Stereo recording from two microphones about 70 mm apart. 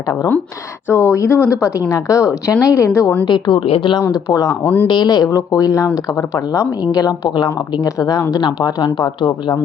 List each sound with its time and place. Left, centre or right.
0.9 s a woman's voice: left
2.7 s a woman's voice: left
3.2 s speech: left
4.1 s speech: left
4.6 s speech: left
4.9 s speech: left
5.3 s speech: left
6.9 s speech: left
7.4 s speech: left
8.3 s speech: left